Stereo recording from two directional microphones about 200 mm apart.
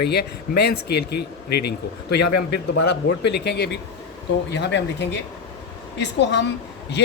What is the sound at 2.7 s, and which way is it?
Speech, 55° left (ahead or behind).